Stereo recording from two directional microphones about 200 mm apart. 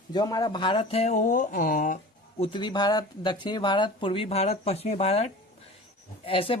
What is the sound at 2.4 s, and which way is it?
Speech, 25° left (ahead or behind).